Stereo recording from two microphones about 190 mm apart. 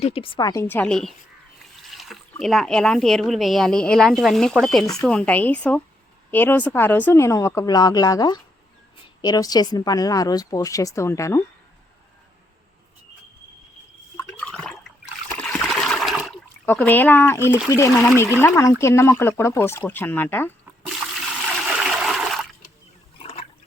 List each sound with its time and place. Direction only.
0.0 s speech: 30° left (ahead or behind); by 1.1 s 5° left (ahead or behind)
1.8 s a sound: centre (ahead or behind)
2.4 s a woman's voice: centre (ahead or behind)
14.2 s water: 5° left (ahead or behind)
16.6 s speech: 10° left (ahead or behind)
21.5 s water: centre (ahead or behind)
23.1 s water: 30° left (ahead or behind)